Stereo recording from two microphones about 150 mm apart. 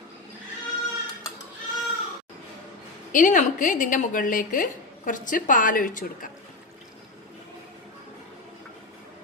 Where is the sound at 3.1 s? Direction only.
60° left (ahead or behind).